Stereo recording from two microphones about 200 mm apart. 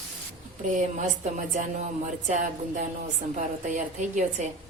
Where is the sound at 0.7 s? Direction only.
40° right (ahead or behind).